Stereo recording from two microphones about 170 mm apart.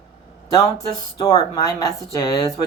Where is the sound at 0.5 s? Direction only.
20° left (ahead or behind).